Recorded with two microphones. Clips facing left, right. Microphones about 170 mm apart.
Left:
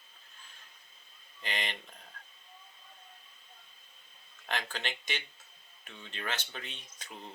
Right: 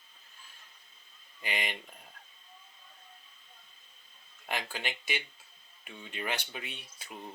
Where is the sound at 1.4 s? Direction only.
10° right (ahead or behind).